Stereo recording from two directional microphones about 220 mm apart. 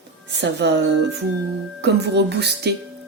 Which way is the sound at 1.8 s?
50° right (ahead or behind).